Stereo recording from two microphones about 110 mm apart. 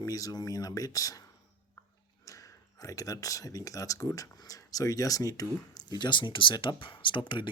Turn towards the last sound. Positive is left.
turn(degrees=45)  # may be behind; listen again after turning